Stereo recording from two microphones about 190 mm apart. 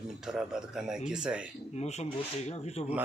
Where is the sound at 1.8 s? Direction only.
35° left (ahead or behind).